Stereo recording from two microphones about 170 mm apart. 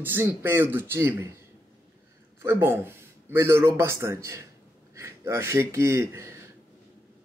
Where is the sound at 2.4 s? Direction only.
15° right (ahead or behind).